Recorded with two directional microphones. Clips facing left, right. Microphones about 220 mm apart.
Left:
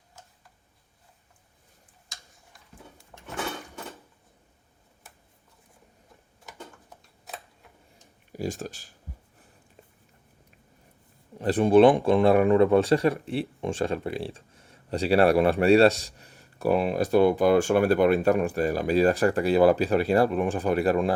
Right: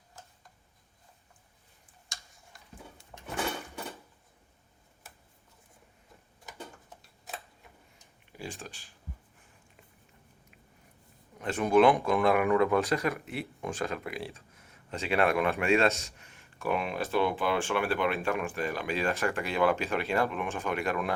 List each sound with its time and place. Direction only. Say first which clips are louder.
3.1 s a sound: right 1 dB; 5° right (ahead or behind)
6.9 s tick-tock: left 1 dB; centre (ahead or behind)
8.3 s speech: left 10 dB; 40° left (ahead or behind)
11.3 s speech: left 6 dB; 30° left (ahead or behind)